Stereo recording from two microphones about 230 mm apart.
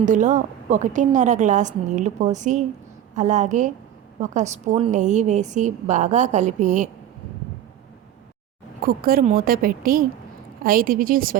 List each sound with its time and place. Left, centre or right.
0.0 s a woman's voice: right
8.9 s a woman's voice: right